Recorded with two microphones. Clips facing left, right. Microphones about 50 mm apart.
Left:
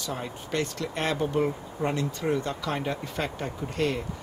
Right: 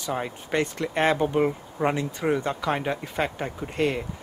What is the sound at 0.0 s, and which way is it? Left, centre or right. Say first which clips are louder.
Speech: right 4 dB; right.